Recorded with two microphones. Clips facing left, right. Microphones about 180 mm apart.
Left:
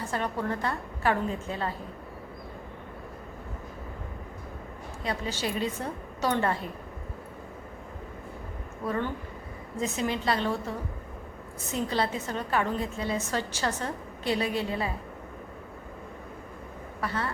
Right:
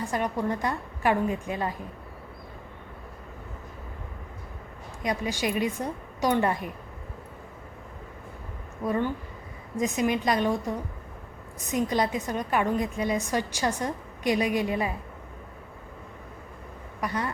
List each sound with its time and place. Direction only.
0.0 s a woman's voice: 15° right (ahead or behind)
5.0 s a woman's voice: 15° right (ahead or behind)
8.8 s a woman's voice: 15° right (ahead or behind)
17.0 s a woman's voice: 15° right (ahead or behind)